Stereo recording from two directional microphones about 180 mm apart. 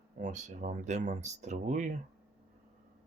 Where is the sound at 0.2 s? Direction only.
40° right (ahead or behind).